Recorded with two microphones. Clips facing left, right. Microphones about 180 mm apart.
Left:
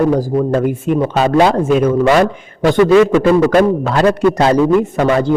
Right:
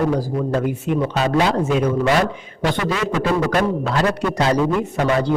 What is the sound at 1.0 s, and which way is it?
Speech, 55° left (ahead or behind).